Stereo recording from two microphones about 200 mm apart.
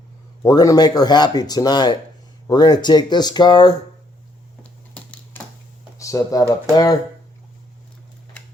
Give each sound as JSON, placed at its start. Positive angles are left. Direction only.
{"t": 0.4, "sound": "speech", "side_deg": 20}
{"t": 4.6, "sound": "typewriter", "side_deg": 5}
{"t": 6.0, "sound": "speech", "side_deg": 15}